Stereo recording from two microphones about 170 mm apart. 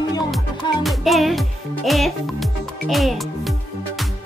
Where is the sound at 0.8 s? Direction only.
Centre (ahead or behind).